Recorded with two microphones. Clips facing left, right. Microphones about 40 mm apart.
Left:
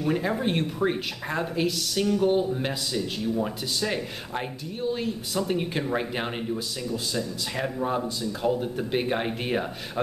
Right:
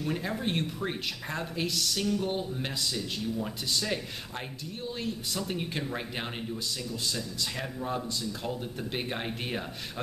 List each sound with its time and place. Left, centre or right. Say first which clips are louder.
0.0 s speech: left 6 dB; centre